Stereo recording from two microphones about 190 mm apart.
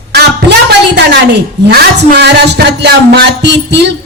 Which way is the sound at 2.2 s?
60° right (ahead or behind).